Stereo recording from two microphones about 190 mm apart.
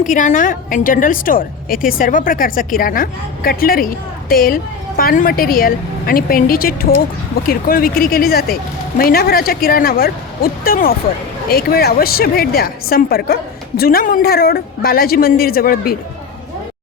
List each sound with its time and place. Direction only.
0.0 s a woman's voice: 40° left (ahead or behind)